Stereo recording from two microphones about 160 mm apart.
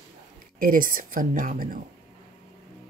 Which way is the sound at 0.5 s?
60° right (ahead or behind).